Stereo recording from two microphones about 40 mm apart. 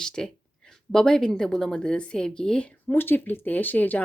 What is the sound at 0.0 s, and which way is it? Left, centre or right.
A woman's voice, centre.